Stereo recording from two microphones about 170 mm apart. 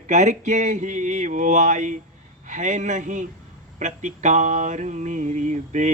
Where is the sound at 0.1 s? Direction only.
45° right (ahead or behind).